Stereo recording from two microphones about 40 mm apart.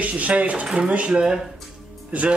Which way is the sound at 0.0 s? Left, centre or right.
Right.